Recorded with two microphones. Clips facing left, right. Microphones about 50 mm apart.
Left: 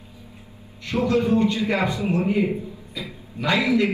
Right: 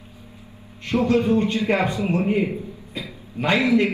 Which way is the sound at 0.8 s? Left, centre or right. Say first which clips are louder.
Right 2 dB; right.